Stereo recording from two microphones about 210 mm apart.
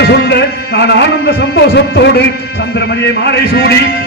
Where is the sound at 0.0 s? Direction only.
50° left (ahead or behind).